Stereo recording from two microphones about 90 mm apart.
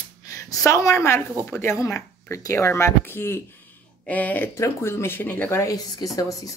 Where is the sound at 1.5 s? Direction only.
30° left (ahead or behind).